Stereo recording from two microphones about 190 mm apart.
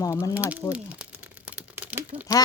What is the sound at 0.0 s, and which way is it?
Speech, 15° left (ahead or behind).